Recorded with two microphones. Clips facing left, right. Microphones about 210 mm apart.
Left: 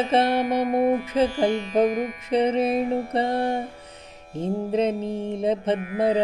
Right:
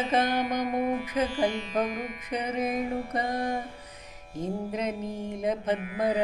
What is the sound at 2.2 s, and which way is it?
Music, 25° left (ahead or behind).